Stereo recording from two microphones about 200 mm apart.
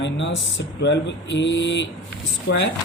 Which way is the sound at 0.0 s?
65° left (ahead or behind).